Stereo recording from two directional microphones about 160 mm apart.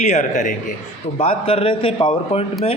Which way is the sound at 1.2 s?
35° left (ahead or behind).